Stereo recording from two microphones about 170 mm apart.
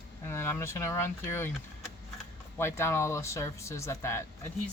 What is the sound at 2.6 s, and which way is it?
Speech, 15° left (ahead or behind).